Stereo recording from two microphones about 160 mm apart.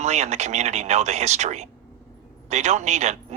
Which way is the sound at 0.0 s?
45° right (ahead or behind).